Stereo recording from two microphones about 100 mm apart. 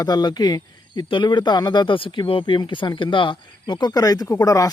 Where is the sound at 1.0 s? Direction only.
55° left (ahead or behind).